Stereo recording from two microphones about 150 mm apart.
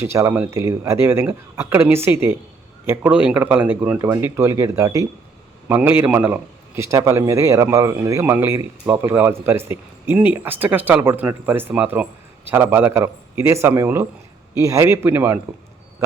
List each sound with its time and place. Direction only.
0.0 s a man's voice: 20° right (ahead or behind)